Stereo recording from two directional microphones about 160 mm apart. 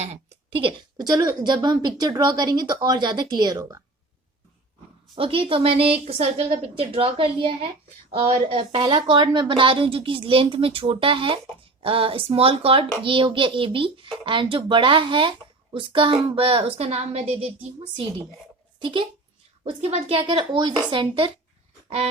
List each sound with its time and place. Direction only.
0.0 s a woman's voice: 40° right (ahead or behind); by 3.8 s 20° right (ahead or behind)
5.1 s a woman's voice: 35° right (ahead or behind)
21.8 s a sound: 40° right (ahead or behind)